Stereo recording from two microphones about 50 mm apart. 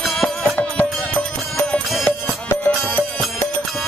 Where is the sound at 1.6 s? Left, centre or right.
Left.